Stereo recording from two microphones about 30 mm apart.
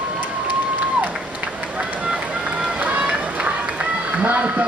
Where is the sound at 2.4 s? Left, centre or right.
Right.